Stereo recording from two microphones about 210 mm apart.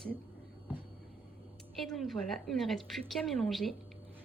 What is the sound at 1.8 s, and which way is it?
A woman's voice, centre (ahead or behind).